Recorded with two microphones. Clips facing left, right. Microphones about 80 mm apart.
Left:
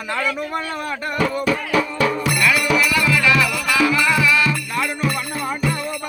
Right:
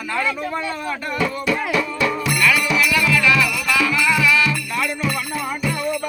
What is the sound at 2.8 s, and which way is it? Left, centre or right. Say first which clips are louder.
Music: even; left.